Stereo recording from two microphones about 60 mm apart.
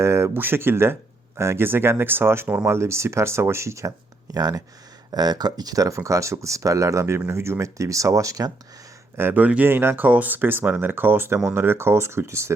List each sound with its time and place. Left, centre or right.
0.0 s a sound: right
0.3 s speech: right
4.4 s speech: right
5.6 s speech: right
9.1 s speech: right
9.4 s speech: right